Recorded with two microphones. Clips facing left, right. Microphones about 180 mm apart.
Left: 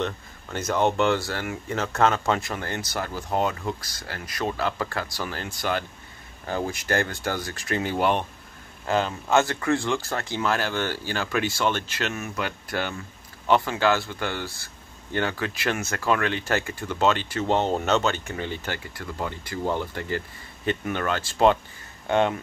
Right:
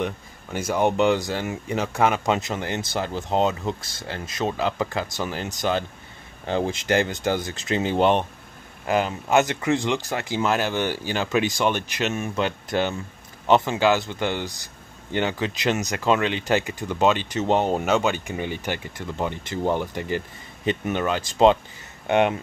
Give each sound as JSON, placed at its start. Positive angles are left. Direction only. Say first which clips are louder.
{"t": 0.0, "sound": "speech", "louder": "right 1 dB", "side_deg": -10}